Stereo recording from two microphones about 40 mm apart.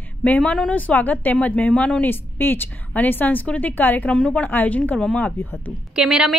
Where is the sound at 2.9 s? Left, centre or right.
Left.